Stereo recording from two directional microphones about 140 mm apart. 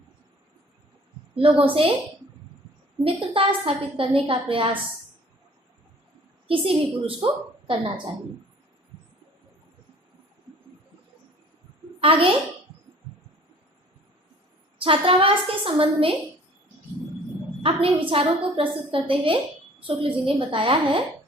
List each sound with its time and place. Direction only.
1.4 s a woman's voice: 45° right (ahead or behind)
3.0 s a woman's voice: 40° right (ahead or behind)
6.5 s a woman's voice: 40° right (ahead or behind)
11.9 s a woman's voice: 40° right (ahead or behind)
14.8 s a woman's voice: 40° right (ahead or behind)
17.6 s a woman's voice: 40° right (ahead or behind)